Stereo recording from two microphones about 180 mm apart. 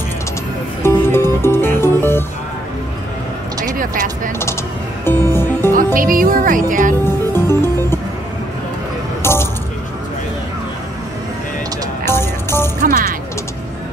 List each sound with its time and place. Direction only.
0.8 s music: 15° left (ahead or behind)
3.6 s a sound: 50° right (ahead or behind)
5.0 s music: 10° left (ahead or behind)
5.9 s speech: 50° right (ahead or behind)
7.3 s music: 15° left (ahead or behind)
9.2 s music: 15° left (ahead or behind)
12.0 s music: 15° left (ahead or behind)
12.8 s music: 55° right (ahead or behind)